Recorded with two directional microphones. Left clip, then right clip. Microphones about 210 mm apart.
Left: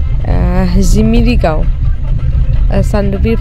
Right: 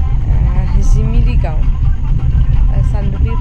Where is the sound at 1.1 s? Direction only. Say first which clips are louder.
Left 14 dB; 45° left (ahead or behind).